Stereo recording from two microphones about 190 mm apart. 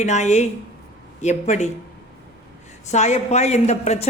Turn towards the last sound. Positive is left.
turn(degrees=35)  # may be behind; listen again after turning